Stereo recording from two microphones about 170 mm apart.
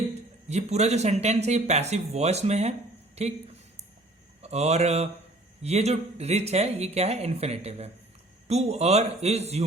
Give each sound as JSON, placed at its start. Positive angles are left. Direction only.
{"t": 0.1, "sound": "speech", "side_deg": -40}
{"t": 4.4, "sound": "speech", "side_deg": -40}